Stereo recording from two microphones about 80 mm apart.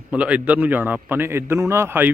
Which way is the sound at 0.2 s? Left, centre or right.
Centre.